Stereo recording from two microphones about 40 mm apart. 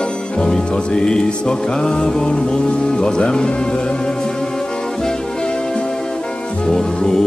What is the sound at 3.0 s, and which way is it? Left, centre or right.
Speech, left.